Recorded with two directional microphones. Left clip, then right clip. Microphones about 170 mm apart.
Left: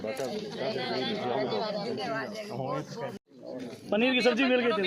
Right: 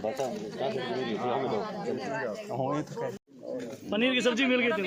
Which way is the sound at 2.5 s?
45° right (ahead or behind).